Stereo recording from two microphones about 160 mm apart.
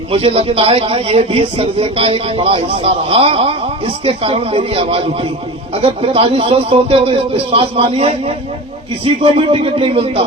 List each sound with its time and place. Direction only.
0.1 s a man's voice: 35° right (ahead or behind)
9.2 s a man's voice: 35° right (ahead or behind)